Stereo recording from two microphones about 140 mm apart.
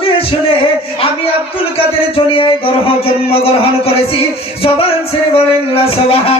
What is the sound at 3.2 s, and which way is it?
Music, 45° left (ahead or behind).